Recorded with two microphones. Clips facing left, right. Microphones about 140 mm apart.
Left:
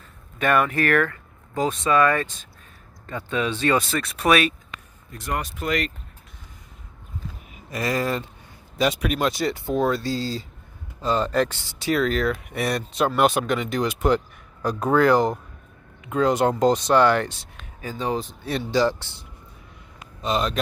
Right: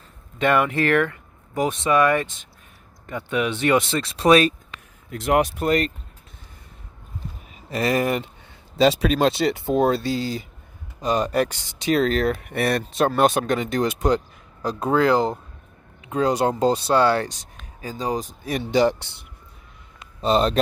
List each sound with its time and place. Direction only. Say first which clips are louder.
0.4 s speech: right 1 dB; 20° right (ahead or behind)
5.1 s speech: right 9 dB; 85° right
5.6 s speech: right 5 dB; 40° right (ahead or behind)
7.7 s speech: right 3 dB; 25° right (ahead or behind)
11.9 s speech: right 2 dB; 25° right (ahead or behind)
12.4 s speech: right 3 dB; 55° right (ahead or behind)
13.1 s speech: even; 45° right (ahead or behind)
14.6 s speech: left 1 dB; 30° right (ahead or behind)
18.1 s speech: even; 10° right (ahead or behind)
20.2 s speech: right 5 dB; 30° right (ahead or behind)